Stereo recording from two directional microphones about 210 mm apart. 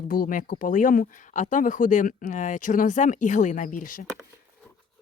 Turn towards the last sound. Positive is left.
turn(degrees=40)  # may be behind; listen again after turning